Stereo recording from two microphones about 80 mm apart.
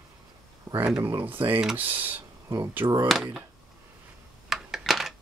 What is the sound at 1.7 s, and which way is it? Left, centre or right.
Speech, right.